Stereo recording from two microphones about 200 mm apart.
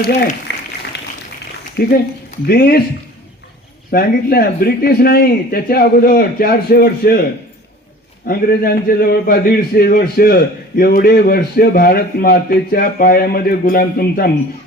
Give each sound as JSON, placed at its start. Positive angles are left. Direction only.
{"t": 0.5, "sound": "a sound", "side_deg": 60}
{"t": 1.7, "sound": "a man's voice", "side_deg": 50}
{"t": 3.9, "sound": "a man's voice", "side_deg": 50}
{"t": 8.3, "sound": "a man's voice", "side_deg": 50}